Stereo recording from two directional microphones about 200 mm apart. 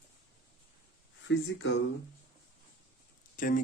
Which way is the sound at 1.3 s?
65° left (ahead or behind).